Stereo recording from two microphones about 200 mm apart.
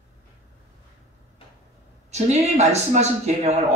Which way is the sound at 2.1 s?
35° right (ahead or behind).